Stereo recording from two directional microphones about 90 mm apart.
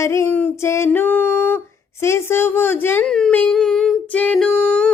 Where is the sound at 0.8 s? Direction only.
20° left (ahead or behind).